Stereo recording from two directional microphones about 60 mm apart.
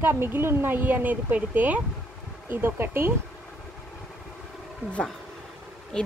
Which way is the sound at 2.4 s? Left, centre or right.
Right.